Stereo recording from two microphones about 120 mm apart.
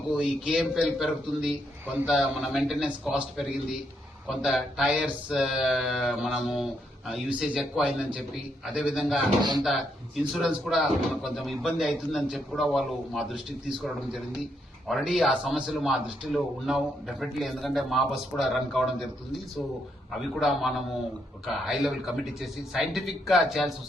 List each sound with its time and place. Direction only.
0.1 s a man's voice: 5° right (ahead or behind)
9.4 s speech: 35° right (ahead or behind)
10.3 s a man's voice: 5° right (ahead or behind)
20.4 s a man's voice: centre (ahead or behind)